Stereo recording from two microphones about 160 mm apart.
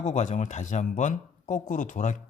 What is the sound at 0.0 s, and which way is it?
Speech, 45° left (ahead or behind).